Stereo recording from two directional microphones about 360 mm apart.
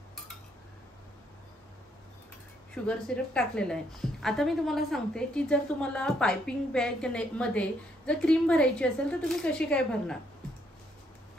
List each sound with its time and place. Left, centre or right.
2.7 s a woman's voice: centre